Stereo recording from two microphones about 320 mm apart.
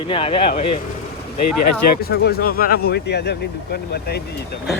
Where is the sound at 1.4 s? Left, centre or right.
Left.